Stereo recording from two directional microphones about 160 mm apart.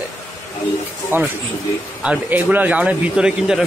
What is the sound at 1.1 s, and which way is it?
Speech, 15° right (ahead or behind).